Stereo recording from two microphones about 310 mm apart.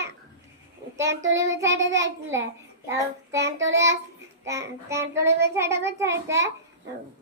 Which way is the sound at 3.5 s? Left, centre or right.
Right.